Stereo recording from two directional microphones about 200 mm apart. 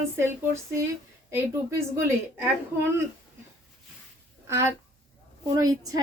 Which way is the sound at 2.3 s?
10° right (ahead or behind).